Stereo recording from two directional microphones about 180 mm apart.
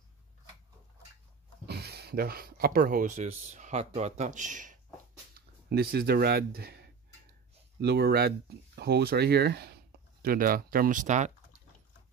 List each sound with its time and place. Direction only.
1.7 s speech: 60° right (ahead or behind)
3.3 s speech: 40° right (ahead or behind)
5.7 s speech: 60° right (ahead or behind)
10.2 s speech: 55° right (ahead or behind)